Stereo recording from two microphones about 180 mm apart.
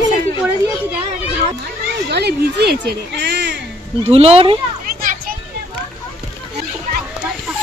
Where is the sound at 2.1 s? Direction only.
65° right (ahead or behind).